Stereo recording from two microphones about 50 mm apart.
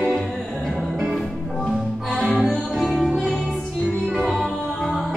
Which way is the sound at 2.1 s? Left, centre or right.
Right.